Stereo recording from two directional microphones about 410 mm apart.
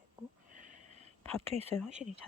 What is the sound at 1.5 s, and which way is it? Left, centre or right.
Speech, centre.